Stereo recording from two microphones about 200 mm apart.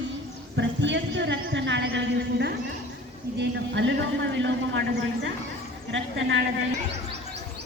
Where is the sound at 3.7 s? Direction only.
65° right (ahead or behind).